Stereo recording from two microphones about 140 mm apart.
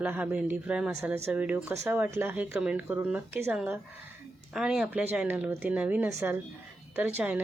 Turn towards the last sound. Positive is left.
turn(degrees=-10)  # may be behind; listen again after turning